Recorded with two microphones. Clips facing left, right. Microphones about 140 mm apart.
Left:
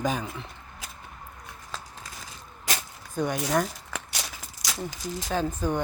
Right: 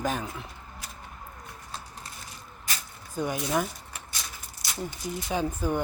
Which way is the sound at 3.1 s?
5° right (ahead or behind).